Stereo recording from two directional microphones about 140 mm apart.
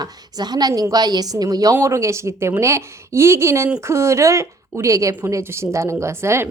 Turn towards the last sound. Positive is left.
turn(degrees=-20)  # may be behind; listen again after turning